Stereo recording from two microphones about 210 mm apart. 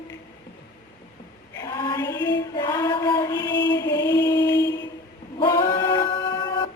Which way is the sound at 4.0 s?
55° left (ahead or behind).